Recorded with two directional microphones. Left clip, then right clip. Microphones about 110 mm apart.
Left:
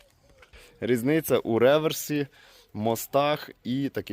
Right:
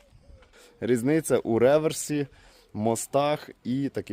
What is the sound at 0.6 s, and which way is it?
Speech, 15° right (ahead or behind).